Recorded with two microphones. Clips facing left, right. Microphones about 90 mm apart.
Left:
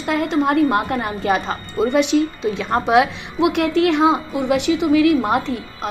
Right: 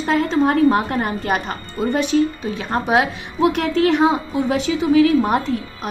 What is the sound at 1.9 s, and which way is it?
Speech, 90° left.